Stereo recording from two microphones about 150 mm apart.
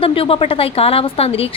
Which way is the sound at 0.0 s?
40° left (ahead or behind).